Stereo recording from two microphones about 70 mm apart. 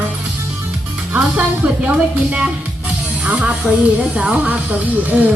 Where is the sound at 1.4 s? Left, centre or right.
Centre.